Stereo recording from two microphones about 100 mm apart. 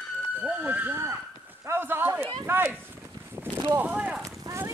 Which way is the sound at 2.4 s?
20° right (ahead or behind).